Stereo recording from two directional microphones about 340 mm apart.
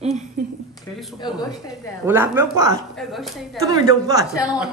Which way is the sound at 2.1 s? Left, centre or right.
Centre.